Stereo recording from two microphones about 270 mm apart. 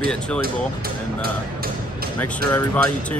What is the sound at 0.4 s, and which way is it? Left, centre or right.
Speech, right.